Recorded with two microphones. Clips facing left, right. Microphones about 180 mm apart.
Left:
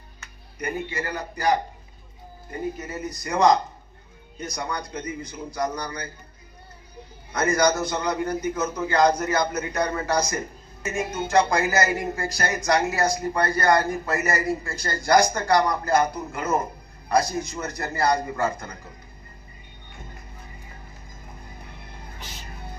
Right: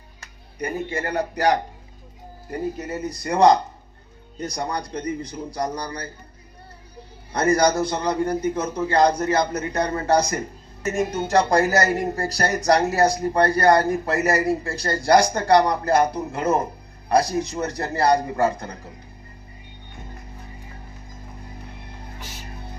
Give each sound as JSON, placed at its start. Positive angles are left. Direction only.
{"t": 0.9, "sound": "a man's voice", "side_deg": -55}
{"t": 2.7, "sound": "a man's voice", "side_deg": -30}
{"t": 7.3, "sound": "a man's voice", "side_deg": -30}